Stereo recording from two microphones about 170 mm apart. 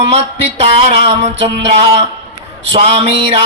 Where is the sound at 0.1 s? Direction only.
35° right (ahead or behind).